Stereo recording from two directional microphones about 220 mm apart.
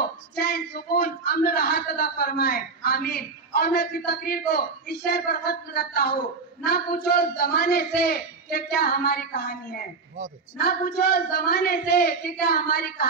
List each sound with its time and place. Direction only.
0.4 s a man's voice: 45° left (ahead or behind)